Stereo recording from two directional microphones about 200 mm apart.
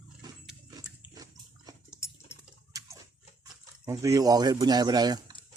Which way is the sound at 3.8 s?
15° right (ahead or behind).